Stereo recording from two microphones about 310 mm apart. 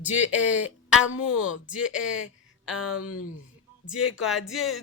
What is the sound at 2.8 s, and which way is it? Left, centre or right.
Speech, left.